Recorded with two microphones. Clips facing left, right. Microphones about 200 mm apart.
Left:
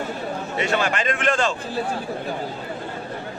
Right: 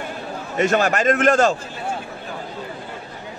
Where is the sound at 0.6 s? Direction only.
45° right (ahead or behind).